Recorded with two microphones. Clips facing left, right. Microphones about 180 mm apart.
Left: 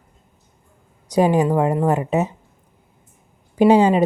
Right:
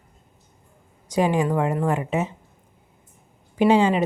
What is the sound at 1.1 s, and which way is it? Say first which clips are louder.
A woman's voice: left 4 dB; 40° left (ahead or behind).